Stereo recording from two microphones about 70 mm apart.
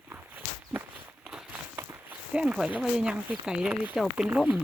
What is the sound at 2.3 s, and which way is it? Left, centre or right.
Speech, centre.